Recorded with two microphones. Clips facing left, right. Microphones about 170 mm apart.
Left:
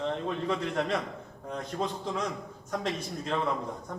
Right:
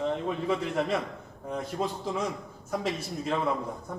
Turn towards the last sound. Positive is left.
turn(degrees=-5)  # may be behind; listen again after turning